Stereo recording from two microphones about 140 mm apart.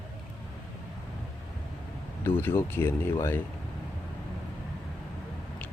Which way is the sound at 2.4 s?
15° left (ahead or behind).